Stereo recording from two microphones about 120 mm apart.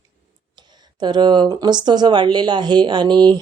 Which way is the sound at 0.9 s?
40° right (ahead or behind).